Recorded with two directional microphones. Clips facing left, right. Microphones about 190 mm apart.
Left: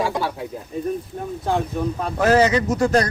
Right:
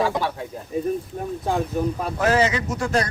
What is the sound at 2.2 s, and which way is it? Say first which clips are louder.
Speech: left 4 dB; 40° left (ahead or behind).